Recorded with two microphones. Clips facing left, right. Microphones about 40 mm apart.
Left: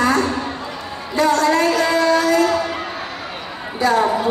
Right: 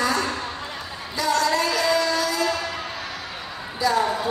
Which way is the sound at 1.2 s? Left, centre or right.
Left.